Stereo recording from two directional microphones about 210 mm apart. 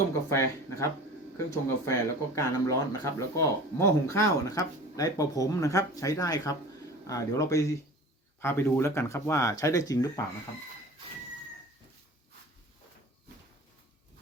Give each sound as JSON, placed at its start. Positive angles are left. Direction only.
{"t": 0.3, "sound": "speech", "side_deg": 15}